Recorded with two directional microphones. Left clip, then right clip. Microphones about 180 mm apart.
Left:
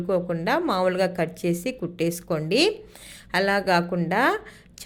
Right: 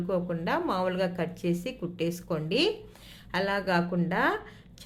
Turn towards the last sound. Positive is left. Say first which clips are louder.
# left 5 dB
turn(degrees=20)  # may be behind; listen again after turning